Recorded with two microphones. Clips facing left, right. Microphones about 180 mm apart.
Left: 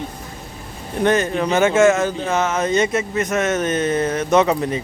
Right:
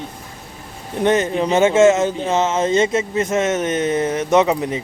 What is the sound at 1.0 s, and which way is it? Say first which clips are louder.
Speech: right 1 dB; 20° right (ahead or behind).